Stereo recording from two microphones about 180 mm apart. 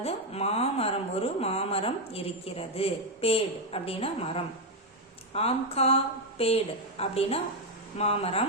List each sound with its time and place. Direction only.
0.0 s speech: 35° left (ahead or behind)